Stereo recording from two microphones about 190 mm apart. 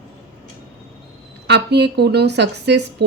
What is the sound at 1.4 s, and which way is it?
A woman's voice, 65° right (ahead or behind).